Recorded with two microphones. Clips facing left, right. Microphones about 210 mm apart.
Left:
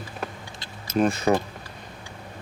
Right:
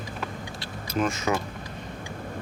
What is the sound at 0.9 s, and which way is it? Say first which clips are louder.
Speech: left 5 dB; 35° left (ahead or behind).